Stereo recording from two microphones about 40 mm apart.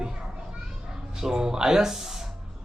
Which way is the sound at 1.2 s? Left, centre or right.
Centre.